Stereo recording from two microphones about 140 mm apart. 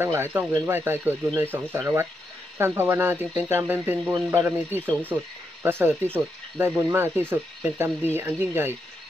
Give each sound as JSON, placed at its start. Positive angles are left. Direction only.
{"t": 0.0, "sound": "speech", "side_deg": -15}